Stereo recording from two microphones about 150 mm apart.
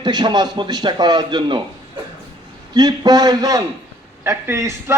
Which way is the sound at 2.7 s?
25° right (ahead or behind).